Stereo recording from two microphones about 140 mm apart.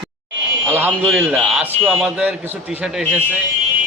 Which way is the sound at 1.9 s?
5° right (ahead or behind).